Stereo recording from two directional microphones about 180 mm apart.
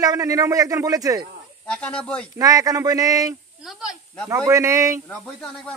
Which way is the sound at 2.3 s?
20° right (ahead or behind).